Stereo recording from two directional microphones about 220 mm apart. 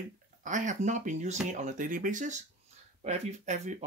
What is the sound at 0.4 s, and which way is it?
Speech, 35° right (ahead or behind).